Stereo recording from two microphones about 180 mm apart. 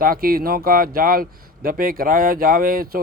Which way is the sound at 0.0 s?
55° right (ahead or behind).